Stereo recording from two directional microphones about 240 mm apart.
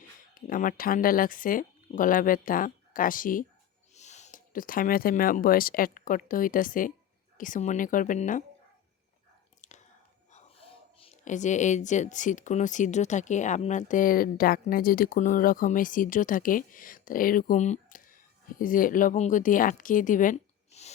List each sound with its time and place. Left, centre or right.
0.3 s speech: left
9.6 s chewing: left
10.3 s speech: left